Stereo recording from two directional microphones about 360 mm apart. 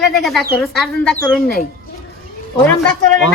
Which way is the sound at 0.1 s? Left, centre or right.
Centre.